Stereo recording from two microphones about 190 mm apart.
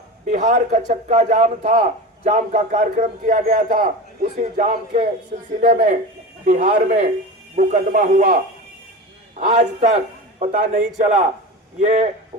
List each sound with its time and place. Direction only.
0.3 s a man's voice: 35° right (ahead or behind)
9.5 s a man's voice: 35° right (ahead or behind)